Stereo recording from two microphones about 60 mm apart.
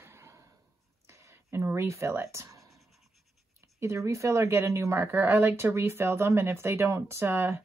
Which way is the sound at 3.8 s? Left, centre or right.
Right.